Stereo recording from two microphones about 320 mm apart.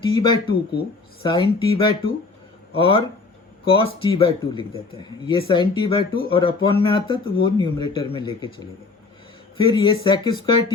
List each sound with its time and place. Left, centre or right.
0.0 s speech: centre